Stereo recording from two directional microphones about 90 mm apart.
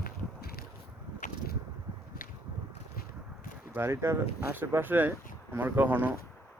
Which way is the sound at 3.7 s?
30° right (ahead or behind).